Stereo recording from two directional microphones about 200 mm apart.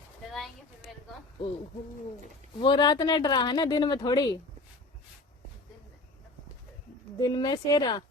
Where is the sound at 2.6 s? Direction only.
25° left (ahead or behind).